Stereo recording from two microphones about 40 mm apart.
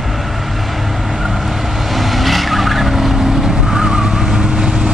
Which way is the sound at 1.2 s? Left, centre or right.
Centre.